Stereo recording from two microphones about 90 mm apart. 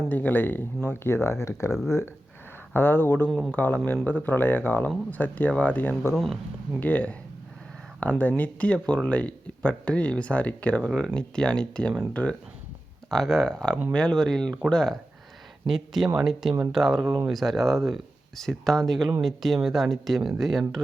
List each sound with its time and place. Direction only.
0.1 s speech: 20° left (ahead or behind)
2.7 s speech: 25° left (ahead or behind)
3.2 s speech: centre (ahead or behind)
3.5 s speech: 20° left (ahead or behind)
6.1 s speech: centre (ahead or behind)
6.7 s speech: 15° left (ahead or behind)
8.2 s speech: 20° left (ahead or behind); by 20.8 s centre (ahead or behind)